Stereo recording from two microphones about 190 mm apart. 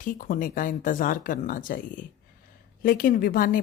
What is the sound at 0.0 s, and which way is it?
Speech, 45° left (ahead or behind).